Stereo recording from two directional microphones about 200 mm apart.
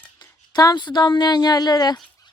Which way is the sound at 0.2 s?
20° left (ahead or behind).